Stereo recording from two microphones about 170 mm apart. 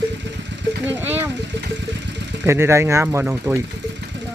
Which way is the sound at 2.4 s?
15° right (ahead or behind).